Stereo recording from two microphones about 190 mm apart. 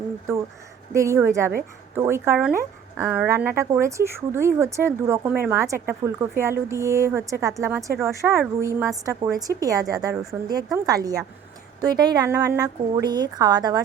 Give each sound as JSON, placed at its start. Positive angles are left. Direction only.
{"t": 0.9, "sound": "a woman's voice", "side_deg": -15}